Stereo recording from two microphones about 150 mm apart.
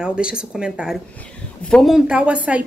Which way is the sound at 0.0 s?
5° right (ahead or behind).